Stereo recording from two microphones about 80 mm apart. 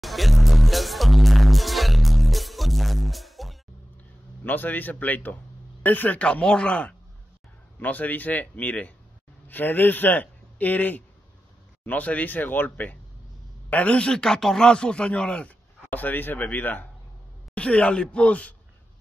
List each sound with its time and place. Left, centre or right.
0.0 s music: centre
4.5 s a man's voice: left